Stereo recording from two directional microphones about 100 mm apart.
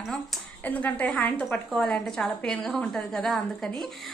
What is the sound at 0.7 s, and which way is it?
A woman's voice, 15° left (ahead or behind).